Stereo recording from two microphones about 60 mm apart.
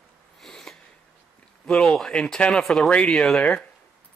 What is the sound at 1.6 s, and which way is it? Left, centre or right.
Speech, centre.